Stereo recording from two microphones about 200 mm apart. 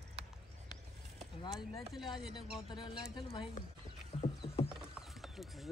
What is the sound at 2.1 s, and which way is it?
Speech, 20° left (ahead or behind).